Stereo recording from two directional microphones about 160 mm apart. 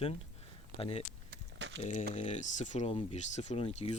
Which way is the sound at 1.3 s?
90° right.